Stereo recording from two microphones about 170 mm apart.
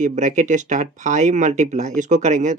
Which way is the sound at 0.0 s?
45° right (ahead or behind).